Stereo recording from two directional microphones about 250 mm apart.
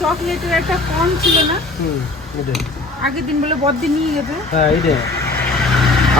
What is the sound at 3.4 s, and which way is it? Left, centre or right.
Speech, right.